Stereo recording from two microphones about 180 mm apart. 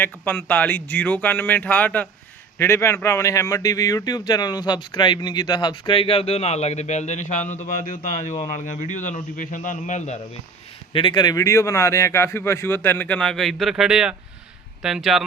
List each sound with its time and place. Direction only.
0.0 s a man's voice: 10° left (ahead or behind); by 10.2 s 45° left (ahead or behind)
10.9 s a man's voice: 25° left (ahead or behind); by 15.2 s centre (ahead or behind)